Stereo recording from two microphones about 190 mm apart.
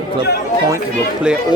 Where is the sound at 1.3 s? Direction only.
5° right (ahead or behind).